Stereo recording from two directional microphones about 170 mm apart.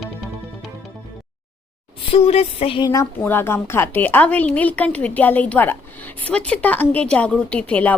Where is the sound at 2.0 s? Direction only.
35° left (ahead or behind).